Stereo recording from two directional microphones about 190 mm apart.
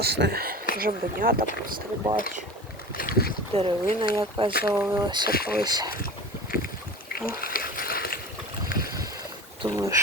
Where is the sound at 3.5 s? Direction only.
30° right (ahead or behind).